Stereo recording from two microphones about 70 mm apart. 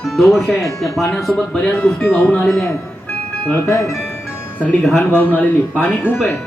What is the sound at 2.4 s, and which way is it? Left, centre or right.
Speech, centre.